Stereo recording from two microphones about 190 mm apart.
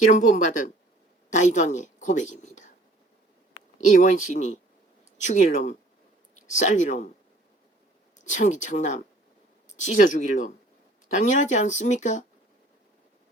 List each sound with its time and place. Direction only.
0.1 s a woman's voice: 40° left (ahead or behind)
3.8 s speech: 40° left (ahead or behind)
8.2 s speech: 40° left (ahead or behind)